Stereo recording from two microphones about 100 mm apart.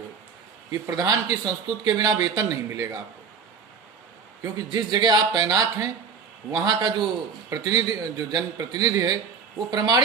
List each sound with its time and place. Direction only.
0.7 s a man's voice: 40° right (ahead or behind)
4.4 s a man's voice: 40° right (ahead or behind)